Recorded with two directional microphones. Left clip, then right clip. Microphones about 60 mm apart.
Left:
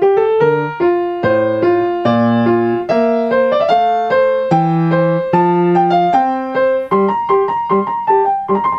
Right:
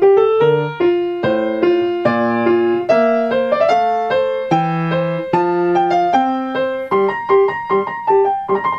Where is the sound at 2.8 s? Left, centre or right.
Left.